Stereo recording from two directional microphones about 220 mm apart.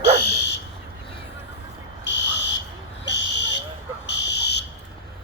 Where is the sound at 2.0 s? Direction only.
55° left (ahead or behind).